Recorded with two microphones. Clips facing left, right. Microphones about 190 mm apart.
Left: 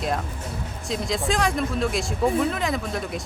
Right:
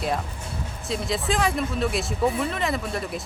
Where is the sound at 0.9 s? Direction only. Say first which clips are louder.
Left 1 dB; centre (ahead or behind).